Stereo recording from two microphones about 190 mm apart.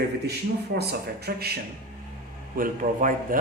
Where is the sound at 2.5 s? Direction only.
45° right (ahead or behind).